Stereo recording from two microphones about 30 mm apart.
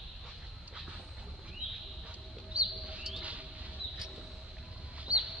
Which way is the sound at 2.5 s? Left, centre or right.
Right.